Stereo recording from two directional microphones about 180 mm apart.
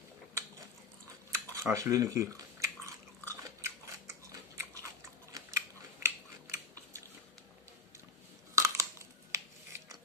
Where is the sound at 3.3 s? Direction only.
15° right (ahead or behind).